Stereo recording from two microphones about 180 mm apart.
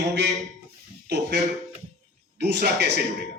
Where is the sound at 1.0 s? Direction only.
70° right (ahead or behind).